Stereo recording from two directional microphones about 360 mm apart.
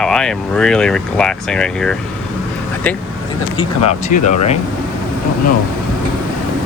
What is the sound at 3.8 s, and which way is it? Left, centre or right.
Speech, centre.